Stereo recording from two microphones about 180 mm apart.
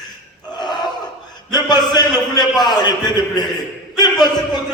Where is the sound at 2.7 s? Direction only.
20° left (ahead or behind).